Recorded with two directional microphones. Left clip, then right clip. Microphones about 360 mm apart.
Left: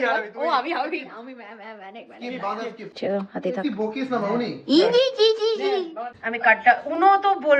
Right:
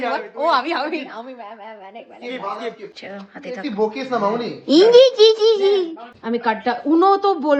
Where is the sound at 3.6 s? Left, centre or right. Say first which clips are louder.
Right 5 dB; centre.